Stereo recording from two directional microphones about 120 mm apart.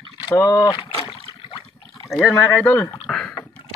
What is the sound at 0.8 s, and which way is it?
Rowboat, 50° left (ahead or behind).